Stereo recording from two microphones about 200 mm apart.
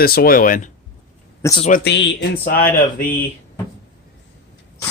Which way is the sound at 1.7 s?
55° left (ahead or behind).